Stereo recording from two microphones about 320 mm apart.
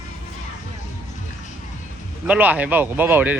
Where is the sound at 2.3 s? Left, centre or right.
Centre.